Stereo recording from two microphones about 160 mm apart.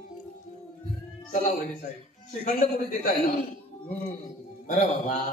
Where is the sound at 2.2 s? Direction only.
50° left (ahead or behind).